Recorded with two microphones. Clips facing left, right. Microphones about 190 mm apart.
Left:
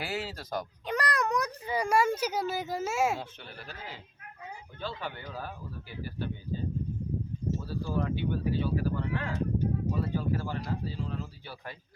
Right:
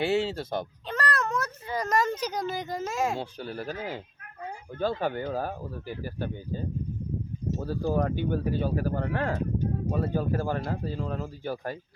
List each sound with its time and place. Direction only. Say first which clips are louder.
0.0 s speech: right 10 dB; 25° right (ahead or behind)
0.9 s a child's voice: left 1 dB; 15° left (ahead or behind)
3.2 s speech: right 8 dB; 40° right (ahead or behind)